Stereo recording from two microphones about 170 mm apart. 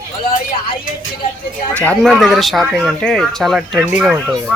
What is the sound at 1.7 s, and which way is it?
Speech, 10° left (ahead or behind).